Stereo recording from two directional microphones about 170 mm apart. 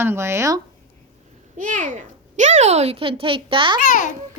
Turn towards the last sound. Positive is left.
turn(degrees=50)  # may be behind; listen again after turning